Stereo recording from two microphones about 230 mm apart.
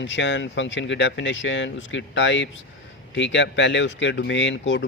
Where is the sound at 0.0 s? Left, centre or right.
Left.